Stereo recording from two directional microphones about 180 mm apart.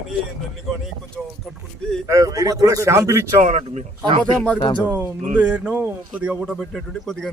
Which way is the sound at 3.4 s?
45° right (ahead or behind).